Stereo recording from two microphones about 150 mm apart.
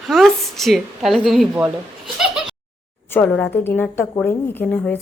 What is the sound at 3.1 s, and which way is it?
A woman's voice, 10° left (ahead or behind).